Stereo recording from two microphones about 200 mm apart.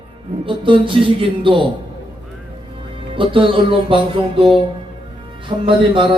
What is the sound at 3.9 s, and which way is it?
Speech, 25° right (ahead or behind).